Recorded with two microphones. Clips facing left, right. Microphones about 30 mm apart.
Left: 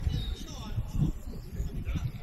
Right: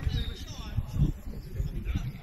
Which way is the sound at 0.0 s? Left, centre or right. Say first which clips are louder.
Right 1 dB; right.